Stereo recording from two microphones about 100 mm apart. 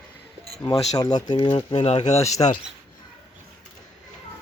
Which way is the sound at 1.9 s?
90° left.